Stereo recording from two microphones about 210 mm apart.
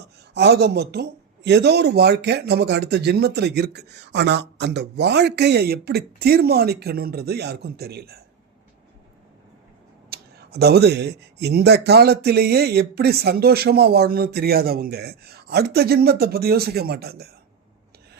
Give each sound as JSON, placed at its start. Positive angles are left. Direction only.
{"t": 0.0, "sound": "speech", "side_deg": -50}
{"t": 10.1, "sound": "speech", "side_deg": -50}